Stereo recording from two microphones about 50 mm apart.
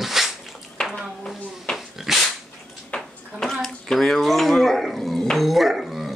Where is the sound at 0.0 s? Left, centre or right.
Centre.